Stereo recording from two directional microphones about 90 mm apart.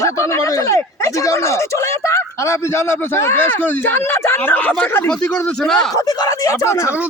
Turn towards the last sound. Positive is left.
turn(degrees=35)  # may be behind; listen again after turning